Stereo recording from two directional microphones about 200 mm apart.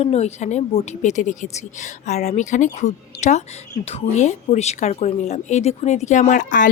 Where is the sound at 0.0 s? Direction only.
30° left (ahead or behind).